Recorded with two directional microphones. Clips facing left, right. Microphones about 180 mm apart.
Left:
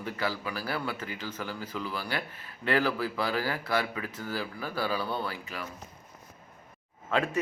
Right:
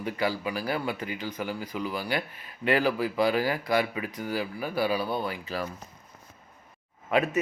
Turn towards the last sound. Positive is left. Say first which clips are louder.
# right 3 dB
turn(degrees=-15)  # may be behind; listen again after turning